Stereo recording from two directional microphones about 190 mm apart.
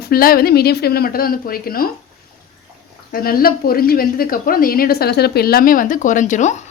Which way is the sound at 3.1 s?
50° left (ahead or behind).